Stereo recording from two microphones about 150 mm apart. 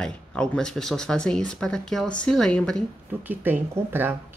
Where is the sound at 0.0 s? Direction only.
5° left (ahead or behind).